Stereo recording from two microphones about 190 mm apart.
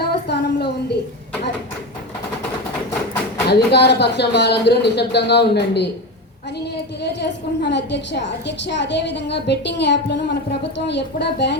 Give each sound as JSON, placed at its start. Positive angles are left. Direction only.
{"t": 0.0, "sound": "a sound", "side_deg": 60}
{"t": 3.5, "sound": "a woman's voice", "side_deg": 60}
{"t": 7.0, "sound": "a woman's voice", "side_deg": 60}